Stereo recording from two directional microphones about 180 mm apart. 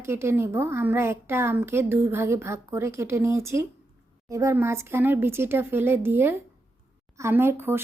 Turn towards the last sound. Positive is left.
turn(degrees=-15)  # may be behind; listen again after turning